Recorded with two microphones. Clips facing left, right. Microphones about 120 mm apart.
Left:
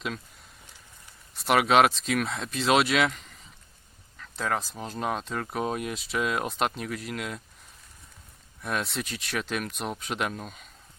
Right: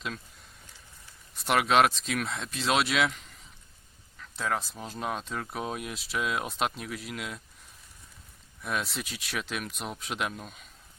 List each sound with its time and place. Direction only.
1.4 s speech: centre (ahead or behind)
8.6 s speech: centre (ahead or behind)